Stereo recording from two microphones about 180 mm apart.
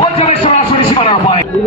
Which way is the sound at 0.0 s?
35° left (ahead or behind).